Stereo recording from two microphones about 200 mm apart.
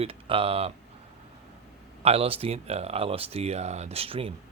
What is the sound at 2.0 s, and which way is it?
Speech, 30° right (ahead or behind).